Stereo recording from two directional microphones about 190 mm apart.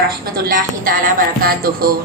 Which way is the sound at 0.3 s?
50° right (ahead or behind).